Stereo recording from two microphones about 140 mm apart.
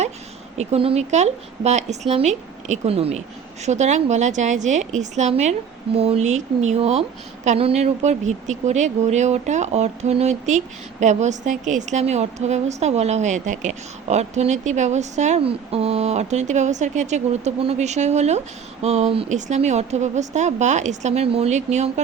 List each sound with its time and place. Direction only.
0.5 s a woman's voice: 50° right (ahead or behind)
15.4 s speech: 45° right (ahead or behind)
19.3 s a woman's voice: 55° right (ahead or behind)